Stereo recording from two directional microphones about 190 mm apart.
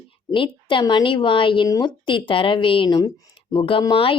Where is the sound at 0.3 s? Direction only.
25° left (ahead or behind).